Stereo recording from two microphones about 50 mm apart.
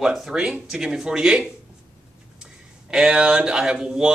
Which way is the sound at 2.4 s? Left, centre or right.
Centre.